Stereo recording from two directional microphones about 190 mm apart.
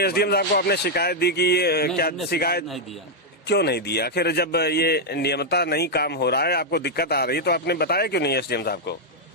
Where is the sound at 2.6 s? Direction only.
Centre (ahead or behind).